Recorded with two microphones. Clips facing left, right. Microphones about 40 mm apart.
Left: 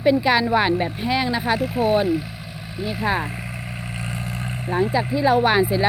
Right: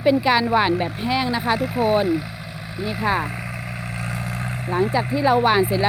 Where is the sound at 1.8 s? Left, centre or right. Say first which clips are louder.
Even; right.